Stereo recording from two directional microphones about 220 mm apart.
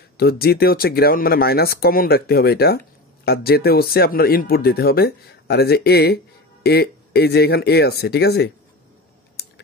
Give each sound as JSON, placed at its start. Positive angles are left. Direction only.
{"t": 0.2, "sound": "speech", "side_deg": 45}